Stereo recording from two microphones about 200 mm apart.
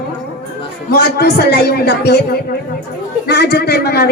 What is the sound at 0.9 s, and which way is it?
A man's voice, 55° left (ahead or behind).